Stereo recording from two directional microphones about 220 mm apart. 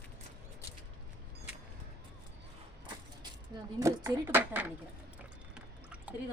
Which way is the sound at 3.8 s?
10° right (ahead or behind).